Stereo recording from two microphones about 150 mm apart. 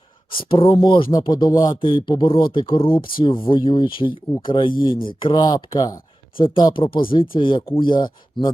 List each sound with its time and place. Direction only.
0.4 s speech: 35° left (ahead or behind)